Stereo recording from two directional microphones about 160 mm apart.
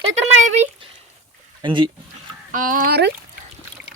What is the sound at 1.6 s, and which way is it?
Speech, 30° right (ahead or behind).